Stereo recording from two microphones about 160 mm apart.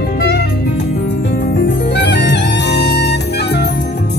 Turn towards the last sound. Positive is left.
turn(degrees=90)